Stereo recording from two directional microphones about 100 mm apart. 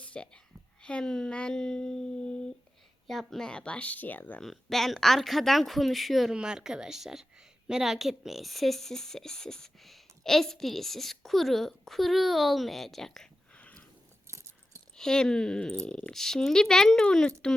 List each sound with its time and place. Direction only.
0.0 s a sound: 10° left (ahead or behind)
0.8 s speech: 10° left (ahead or behind)
4.4 s speech: 5° left (ahead or behind)
14.3 s keys jangling: 30° right (ahead or behind)
14.9 s speech: 5° left (ahead or behind)